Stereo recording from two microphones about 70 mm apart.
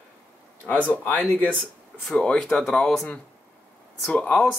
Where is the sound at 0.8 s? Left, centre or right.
Left.